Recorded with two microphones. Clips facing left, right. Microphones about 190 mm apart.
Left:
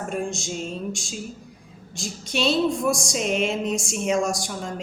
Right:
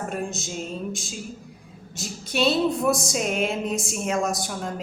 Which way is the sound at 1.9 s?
5° right (ahead or behind).